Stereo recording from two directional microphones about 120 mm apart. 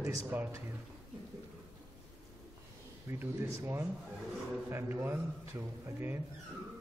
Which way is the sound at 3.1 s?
25° right (ahead or behind).